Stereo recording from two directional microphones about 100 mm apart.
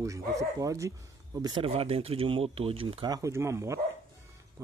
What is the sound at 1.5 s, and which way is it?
Speech, 70° right (ahead or behind).